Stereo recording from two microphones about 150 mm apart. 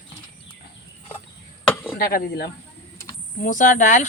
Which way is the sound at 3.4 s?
60° left (ahead or behind).